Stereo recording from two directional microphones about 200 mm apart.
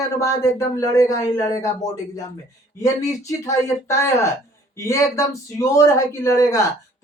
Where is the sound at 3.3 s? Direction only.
15° left (ahead or behind).